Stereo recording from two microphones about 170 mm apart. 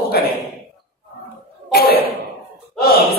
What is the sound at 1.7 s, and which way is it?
Speech, 65° left (ahead or behind).